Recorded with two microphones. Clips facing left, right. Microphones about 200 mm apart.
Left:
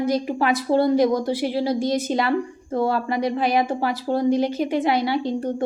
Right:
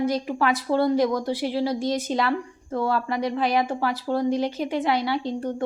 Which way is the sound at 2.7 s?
25° left (ahead or behind).